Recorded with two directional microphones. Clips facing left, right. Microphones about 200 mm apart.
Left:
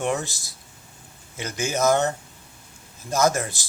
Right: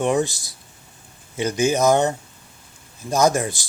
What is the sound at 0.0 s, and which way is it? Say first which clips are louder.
Speech: right 6 dB; 15° right (ahead or behind).